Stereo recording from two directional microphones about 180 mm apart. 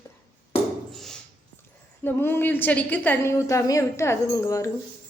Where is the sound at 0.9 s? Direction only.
Centre (ahead or behind).